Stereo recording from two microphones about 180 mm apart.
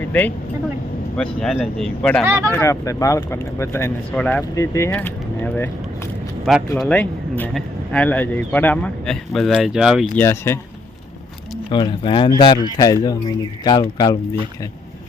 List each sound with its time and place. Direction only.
0.0 s speech: 10° left (ahead or behind)
2.2 s speech: 15° right (ahead or behind)
2.5 s speech: 15° left (ahead or behind)
6.4 s speech: centre (ahead or behind)
10.2 s speech: 15° left (ahead or behind)
11.7 s speech: 25° left (ahead or behind)